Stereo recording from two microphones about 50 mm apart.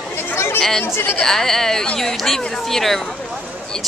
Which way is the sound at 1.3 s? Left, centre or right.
Centre.